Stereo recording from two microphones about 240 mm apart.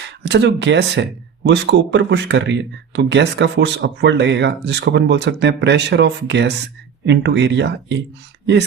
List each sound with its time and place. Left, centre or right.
0.2 s speech: right